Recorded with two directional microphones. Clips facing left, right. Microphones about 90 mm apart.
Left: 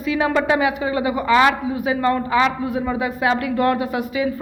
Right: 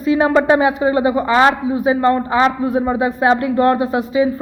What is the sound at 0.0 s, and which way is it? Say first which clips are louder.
A woman's voice: right 5 dB; 30° right (ahead or behind).